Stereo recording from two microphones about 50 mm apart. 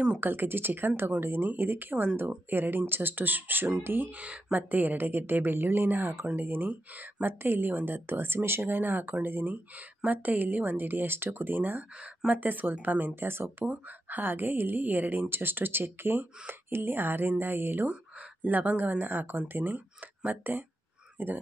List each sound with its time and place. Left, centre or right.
0.2 s a woman's voice: right
4.1 s a woman's voice: right
18.4 s a woman's voice: right